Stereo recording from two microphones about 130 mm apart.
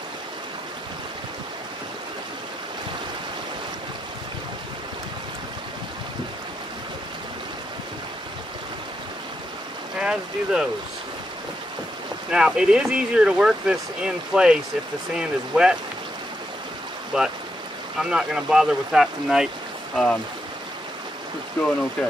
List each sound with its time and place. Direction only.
9.9 s speech: 5° right (ahead or behind)
12.3 s speech: 5° right (ahead or behind)
17.1 s speech: 5° right (ahead or behind)
21.6 s speech: 15° left (ahead or behind)